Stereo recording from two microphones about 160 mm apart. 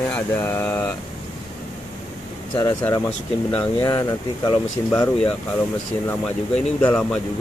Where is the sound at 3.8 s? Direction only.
25° left (ahead or behind).